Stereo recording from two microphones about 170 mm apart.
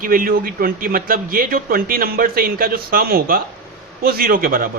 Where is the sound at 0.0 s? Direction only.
55° right (ahead or behind).